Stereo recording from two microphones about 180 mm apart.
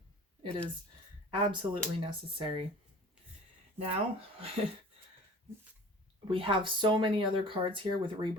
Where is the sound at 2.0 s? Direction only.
30° right (ahead or behind).